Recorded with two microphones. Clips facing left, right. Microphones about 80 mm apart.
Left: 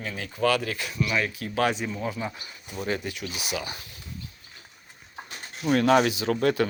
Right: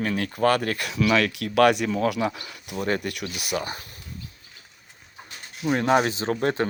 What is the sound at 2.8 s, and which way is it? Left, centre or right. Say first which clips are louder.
Speech: right 4 dB; right.